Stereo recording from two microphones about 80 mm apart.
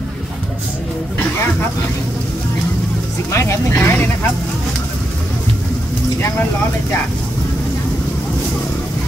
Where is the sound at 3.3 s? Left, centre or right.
Left.